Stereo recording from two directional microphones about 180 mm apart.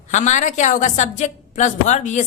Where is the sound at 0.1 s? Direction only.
40° left (ahead or behind).